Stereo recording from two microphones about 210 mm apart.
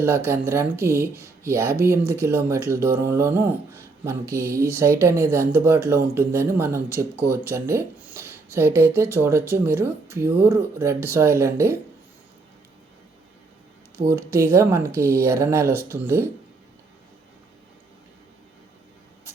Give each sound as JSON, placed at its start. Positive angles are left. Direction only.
{"t": 0.3, "sound": "speech", "side_deg": -10}
{"t": 14.1, "sound": "speech", "side_deg": -15}